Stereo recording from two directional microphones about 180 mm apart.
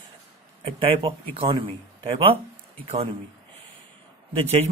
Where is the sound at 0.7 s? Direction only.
30° right (ahead or behind).